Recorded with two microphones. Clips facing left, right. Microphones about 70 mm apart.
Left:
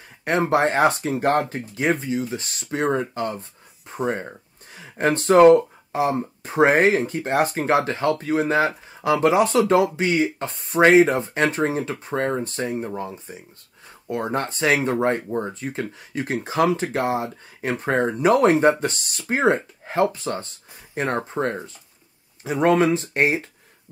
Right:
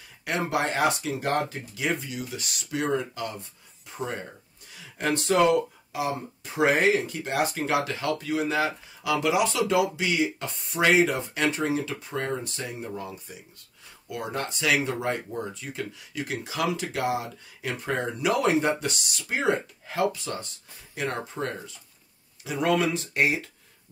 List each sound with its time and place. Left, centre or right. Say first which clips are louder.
0.2 s speech: left 7 dB; left